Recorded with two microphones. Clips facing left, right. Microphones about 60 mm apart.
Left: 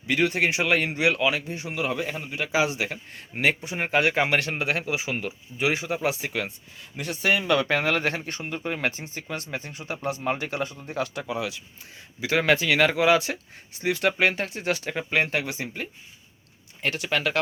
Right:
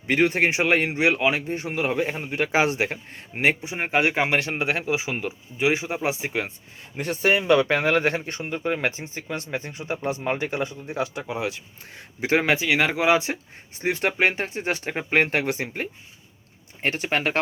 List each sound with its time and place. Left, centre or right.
0.1 s a man's voice: right
3.6 s speech: centre
6.9 s speech: right
12.4 s speech: centre; by 15.9 s right
16.8 s a man's voice: right